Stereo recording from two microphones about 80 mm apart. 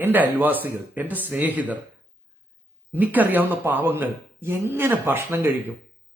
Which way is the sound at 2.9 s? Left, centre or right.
Right.